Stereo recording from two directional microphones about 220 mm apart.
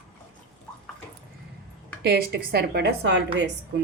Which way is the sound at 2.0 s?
45° right (ahead or behind).